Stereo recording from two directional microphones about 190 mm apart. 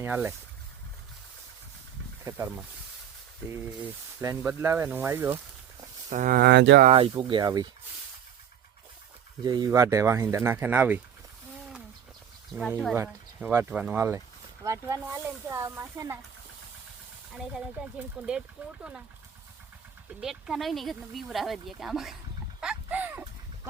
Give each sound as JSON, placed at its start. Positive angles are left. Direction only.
{"t": 0.0, "sound": "speech", "side_deg": -10}
{"t": 3.5, "sound": "speech", "side_deg": -15}
{"t": 6.1, "sound": "speech", "side_deg": -45}
{"t": 6.8, "sound": "speech", "side_deg": -30}
{"t": 9.4, "sound": "speech", "side_deg": -20}
{"t": 12.6, "sound": "speech", "side_deg": 10}
{"t": 13.0, "sound": "speech", "side_deg": -15}
{"t": 17.3, "sound": "speech", "side_deg": -5}
{"t": 20.2, "sound": "speech", "side_deg": 0}
{"t": 22.6, "sound": "a sound", "side_deg": -5}